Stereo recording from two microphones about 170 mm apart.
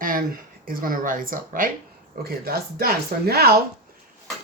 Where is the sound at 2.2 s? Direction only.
65° right (ahead or behind).